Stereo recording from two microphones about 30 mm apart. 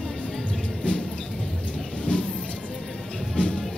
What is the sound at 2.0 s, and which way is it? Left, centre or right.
Music, left.